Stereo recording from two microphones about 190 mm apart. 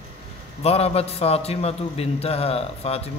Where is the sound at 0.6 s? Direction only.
30° left (ahead or behind).